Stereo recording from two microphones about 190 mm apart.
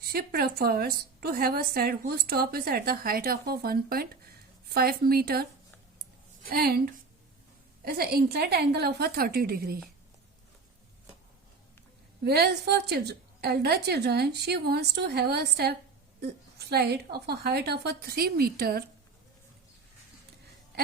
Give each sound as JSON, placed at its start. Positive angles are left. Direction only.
{"t": 0.0, "sound": "a woman's voice", "side_deg": -55}
{"t": 12.2, "sound": "a woman's voice", "side_deg": -55}